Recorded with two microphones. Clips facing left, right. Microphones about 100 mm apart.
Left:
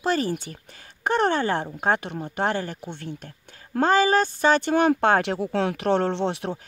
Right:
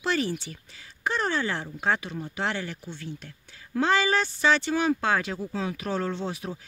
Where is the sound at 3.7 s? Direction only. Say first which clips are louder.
Left 4 dB; 45° left (ahead or behind).